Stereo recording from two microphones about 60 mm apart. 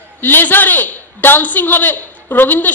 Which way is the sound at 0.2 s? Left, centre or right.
Left.